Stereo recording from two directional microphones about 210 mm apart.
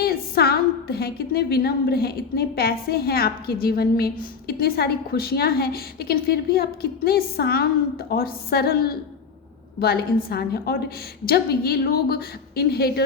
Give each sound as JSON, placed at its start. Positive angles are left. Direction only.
{"t": 0.0, "sound": "a woman's voice", "side_deg": 45}